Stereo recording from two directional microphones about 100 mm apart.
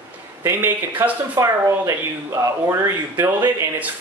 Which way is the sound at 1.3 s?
35° right (ahead or behind).